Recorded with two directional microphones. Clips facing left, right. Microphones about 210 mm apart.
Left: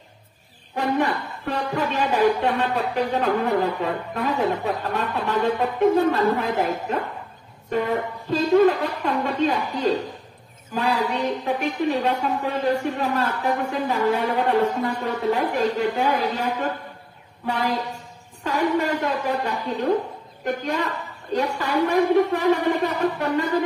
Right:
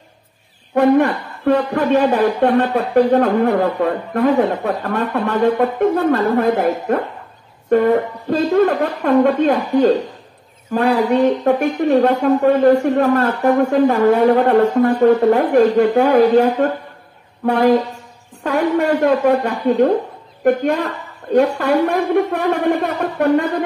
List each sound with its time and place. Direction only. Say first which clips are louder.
0.7 s a man's voice: right 10 dB; 55° right (ahead or behind)
18.4 s a man's voice: right 6 dB; 55° right (ahead or behind)